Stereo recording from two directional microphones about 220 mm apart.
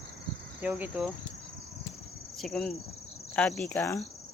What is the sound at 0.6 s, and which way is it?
Speech, 5° right (ahead or behind).